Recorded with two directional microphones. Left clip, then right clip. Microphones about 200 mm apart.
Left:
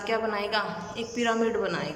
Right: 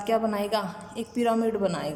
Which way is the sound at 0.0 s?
30° right (ahead or behind).